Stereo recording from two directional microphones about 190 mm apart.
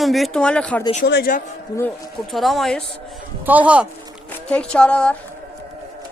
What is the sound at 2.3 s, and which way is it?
Speech, centre (ahead or behind).